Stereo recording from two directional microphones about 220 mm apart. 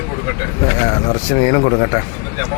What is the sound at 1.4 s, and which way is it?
Speech, 45° left (ahead or behind).